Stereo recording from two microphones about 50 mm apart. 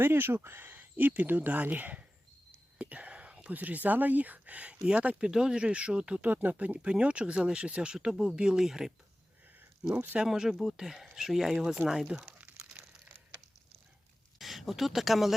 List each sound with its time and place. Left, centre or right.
0.0 s speech: right; by 6.2 s centre
6.2 s speech: right; by 8.9 s centre
9.9 s speech: right
10.2 s speech: centre
14.3 s speech: centre